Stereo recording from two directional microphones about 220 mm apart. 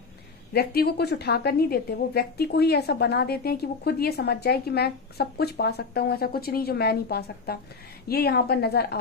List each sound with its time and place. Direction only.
0.5 s a woman's voice: 45° left (ahead or behind)